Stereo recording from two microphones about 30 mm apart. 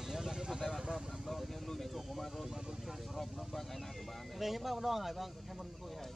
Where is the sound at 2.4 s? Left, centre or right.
Centre.